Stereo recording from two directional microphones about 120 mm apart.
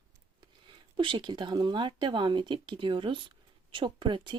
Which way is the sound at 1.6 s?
40° right (ahead or behind).